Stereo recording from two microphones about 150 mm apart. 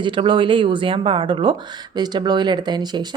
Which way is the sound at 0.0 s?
30° right (ahead or behind).